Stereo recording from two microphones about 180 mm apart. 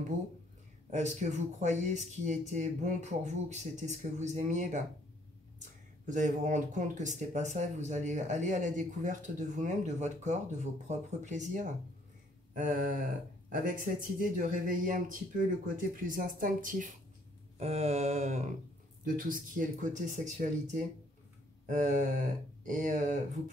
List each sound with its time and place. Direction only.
0.8 s speech: 40° right (ahead or behind)
17.6 s speech: 35° right (ahead or behind)
19.0 s speech: 50° right (ahead or behind)